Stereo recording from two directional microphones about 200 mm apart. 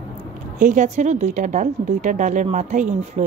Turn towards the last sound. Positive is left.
turn(degrees=-35)  # may be behind; listen again after turning